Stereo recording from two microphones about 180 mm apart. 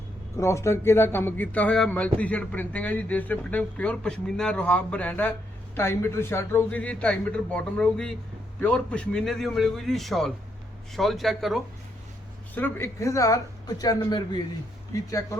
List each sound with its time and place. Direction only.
0.3 s a man's voice: 15° left (ahead or behind); by 11.6 s centre (ahead or behind)
12.5 s speech: 10° left (ahead or behind)